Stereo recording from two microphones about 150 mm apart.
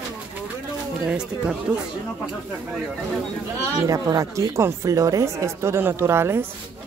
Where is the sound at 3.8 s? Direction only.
20° right (ahead or behind).